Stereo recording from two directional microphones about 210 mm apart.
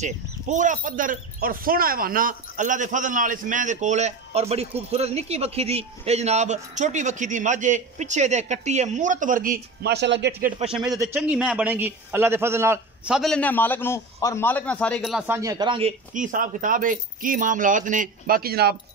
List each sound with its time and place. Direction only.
0.0 s speech: 35° right (ahead or behind); by 10.3 s 55° right (ahead or behind)
10.4 s a man's voice: 30° right (ahead or behind)
11.0 s a man's voice: 10° right (ahead or behind)
16.1 s speech: 40° right (ahead or behind)